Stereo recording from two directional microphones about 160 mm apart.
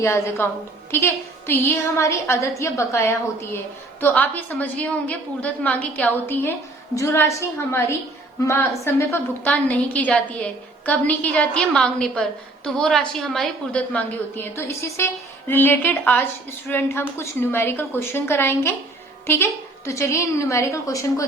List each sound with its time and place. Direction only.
0.0 s a woman's voice: 15° left (ahead or behind)